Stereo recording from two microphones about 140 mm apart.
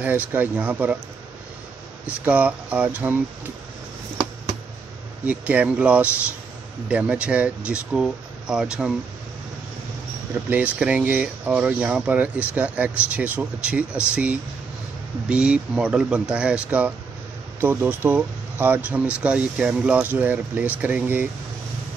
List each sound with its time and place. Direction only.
0.0 s speech: 15° right (ahead or behind)
2.0 s speech: 10° right (ahead or behind)
5.2 s speech: 10° right (ahead or behind)
10.5 s speech: 10° right (ahead or behind)